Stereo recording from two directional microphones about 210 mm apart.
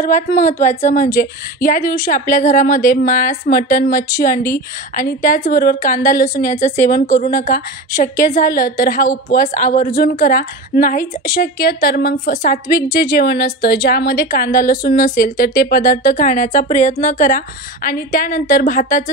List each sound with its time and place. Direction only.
0.0 s a woman's voice: 40° left (ahead or behind)